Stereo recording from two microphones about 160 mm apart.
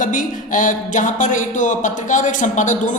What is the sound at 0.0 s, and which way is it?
Speech, 55° left (ahead or behind).